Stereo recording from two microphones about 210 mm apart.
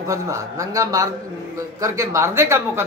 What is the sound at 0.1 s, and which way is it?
A man's voice, 15° right (ahead or behind).